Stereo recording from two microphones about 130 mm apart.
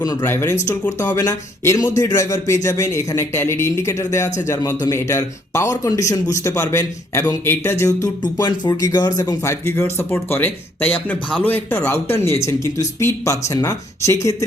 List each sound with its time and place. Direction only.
0.0 s a man's voice: 30° left (ahead or behind)
0.3 s a man's voice: 20° left (ahead or behind)